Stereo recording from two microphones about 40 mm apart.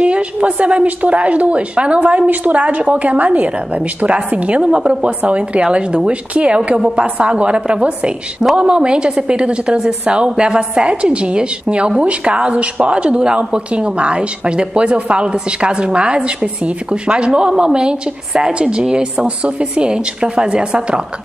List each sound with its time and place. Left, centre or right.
0.0 s a woman's voice: right
4.6 s speech: right